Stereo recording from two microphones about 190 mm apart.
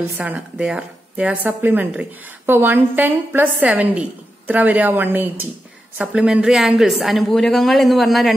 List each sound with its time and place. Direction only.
0.2 s speech: 5° right (ahead or behind)